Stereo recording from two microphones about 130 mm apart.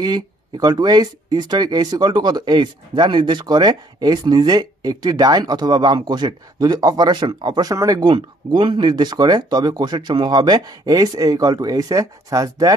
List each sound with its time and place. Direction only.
0.0 s speech: 30° right (ahead or behind)